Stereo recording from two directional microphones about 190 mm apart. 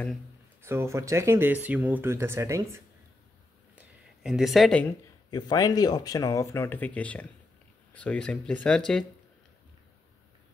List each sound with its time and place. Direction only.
0.6 s speech: 15° right (ahead or behind)
3.7 s a sound: 5° right (ahead or behind)
5.3 s speech: 20° left (ahead or behind); by 9.0 s 5° left (ahead or behind)